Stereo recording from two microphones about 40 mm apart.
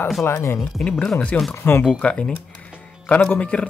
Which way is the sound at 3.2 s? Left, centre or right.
Left.